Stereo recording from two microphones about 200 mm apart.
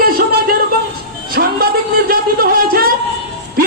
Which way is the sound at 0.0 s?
45° right (ahead or behind).